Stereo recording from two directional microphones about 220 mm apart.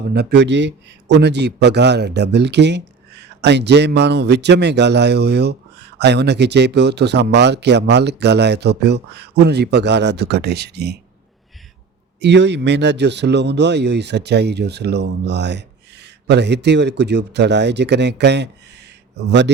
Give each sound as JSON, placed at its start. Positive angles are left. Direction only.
{"t": 0.1, "sound": "a man's voice", "side_deg": -50}
{"t": 12.2, "sound": "a man's voice", "side_deg": -50}